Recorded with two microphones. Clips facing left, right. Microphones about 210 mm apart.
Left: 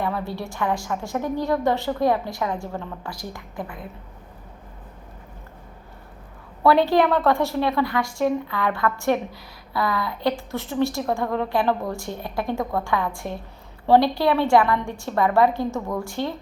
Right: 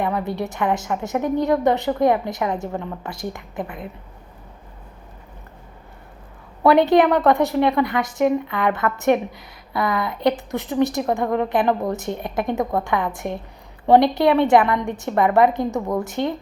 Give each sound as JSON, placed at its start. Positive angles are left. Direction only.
{"t": 0.0, "sound": "a woman's voice", "side_deg": -20}
{"t": 6.6, "sound": "a woman's voice", "side_deg": -20}